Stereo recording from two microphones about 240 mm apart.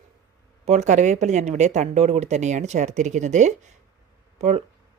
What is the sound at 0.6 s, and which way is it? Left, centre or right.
Speech, right.